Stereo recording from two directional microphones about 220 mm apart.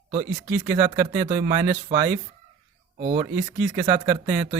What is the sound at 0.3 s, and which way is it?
Speech, 5° right (ahead or behind).